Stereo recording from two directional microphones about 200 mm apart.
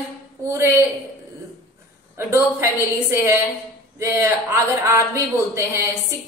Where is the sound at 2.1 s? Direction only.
15° right (ahead or behind).